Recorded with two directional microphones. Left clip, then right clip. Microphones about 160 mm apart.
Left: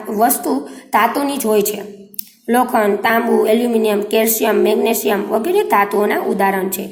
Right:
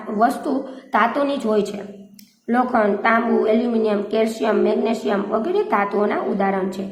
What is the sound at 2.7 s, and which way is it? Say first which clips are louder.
A woman's voice: left 3 dB; 25° left (ahead or behind).